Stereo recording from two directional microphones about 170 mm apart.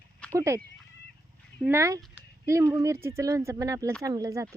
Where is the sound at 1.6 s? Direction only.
15° right (ahead or behind).